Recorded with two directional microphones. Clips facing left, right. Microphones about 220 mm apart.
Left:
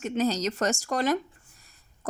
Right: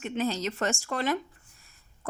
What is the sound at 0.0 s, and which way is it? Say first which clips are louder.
A woman's voice: left 3 dB; 40° left (ahead or behind).